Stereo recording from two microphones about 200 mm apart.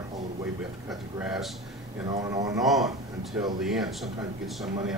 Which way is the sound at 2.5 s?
Centre (ahead or behind).